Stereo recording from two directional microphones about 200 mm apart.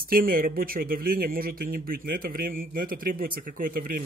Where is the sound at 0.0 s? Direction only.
45° right (ahead or behind).